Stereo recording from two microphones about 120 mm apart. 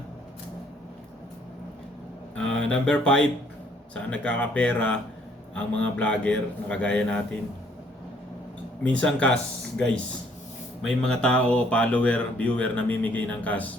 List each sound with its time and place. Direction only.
2.3 s a sound: 5° left (ahead or behind)
3.9 s speech: 10° left (ahead or behind)
8.8 s speech: 10° left (ahead or behind)